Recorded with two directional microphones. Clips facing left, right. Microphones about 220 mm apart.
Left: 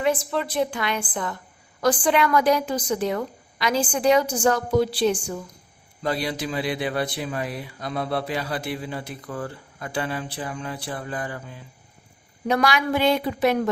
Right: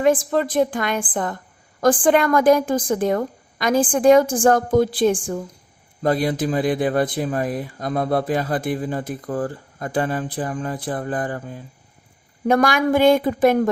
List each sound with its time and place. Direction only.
0.0 s speech: 45° right (ahead or behind)